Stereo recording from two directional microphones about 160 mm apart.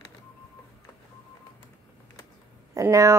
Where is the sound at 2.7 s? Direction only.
20° right (ahead or behind).